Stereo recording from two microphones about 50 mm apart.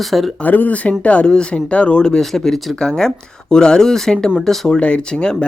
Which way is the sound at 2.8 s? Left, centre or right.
Centre.